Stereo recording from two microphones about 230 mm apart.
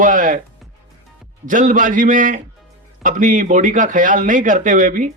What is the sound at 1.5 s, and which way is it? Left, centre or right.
A man's voice, right.